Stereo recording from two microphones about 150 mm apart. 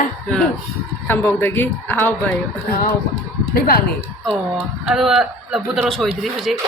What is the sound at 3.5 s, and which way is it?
Speech, 90° left.